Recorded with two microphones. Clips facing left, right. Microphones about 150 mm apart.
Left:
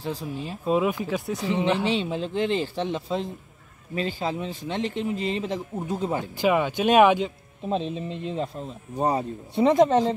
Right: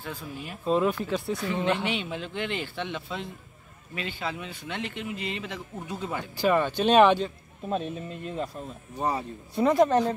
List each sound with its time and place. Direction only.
0.0 s a man's voice: 35° left (ahead or behind)
0.7 s a woman's voice: 5° left (ahead or behind)
1.9 s a man's voice: 30° left (ahead or behind)
6.4 s speech: 10° left (ahead or behind)
8.9 s a man's voice: 35° left (ahead or behind)
9.6 s speech: 20° left (ahead or behind)